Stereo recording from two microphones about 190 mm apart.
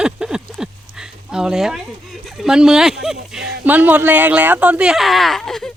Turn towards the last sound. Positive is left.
turn(degrees=0)  # may be behind; listen again after turning